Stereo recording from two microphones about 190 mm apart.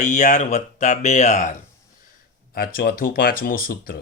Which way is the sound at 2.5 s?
50° left (ahead or behind).